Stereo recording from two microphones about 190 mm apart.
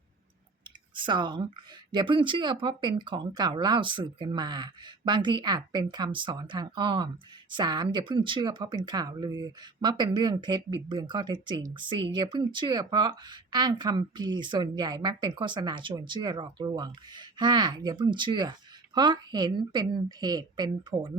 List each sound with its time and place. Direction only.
0.9 s speech: 25° right (ahead or behind)